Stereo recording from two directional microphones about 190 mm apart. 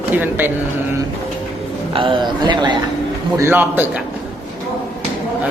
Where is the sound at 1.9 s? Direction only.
25° right (ahead or behind).